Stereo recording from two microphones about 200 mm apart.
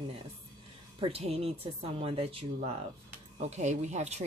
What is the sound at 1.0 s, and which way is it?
Speech, 30° right (ahead or behind).